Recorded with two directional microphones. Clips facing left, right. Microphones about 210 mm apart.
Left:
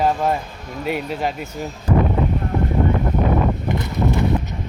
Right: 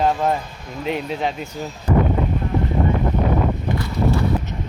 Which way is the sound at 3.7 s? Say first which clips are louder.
Even; 20° left (ahead or behind).